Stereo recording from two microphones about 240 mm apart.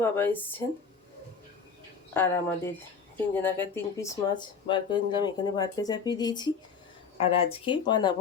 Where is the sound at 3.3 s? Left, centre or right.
Centre.